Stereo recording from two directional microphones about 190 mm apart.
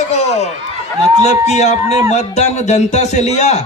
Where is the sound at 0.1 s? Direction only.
35° left (ahead or behind).